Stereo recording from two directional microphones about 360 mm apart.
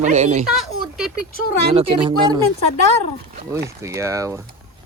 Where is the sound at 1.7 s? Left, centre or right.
Centre.